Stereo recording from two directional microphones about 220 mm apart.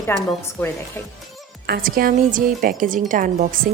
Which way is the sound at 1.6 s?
40° right (ahead or behind).